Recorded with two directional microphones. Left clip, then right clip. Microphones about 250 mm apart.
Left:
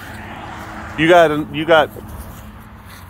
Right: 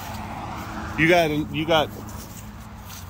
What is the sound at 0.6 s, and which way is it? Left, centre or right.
Vehicle, right.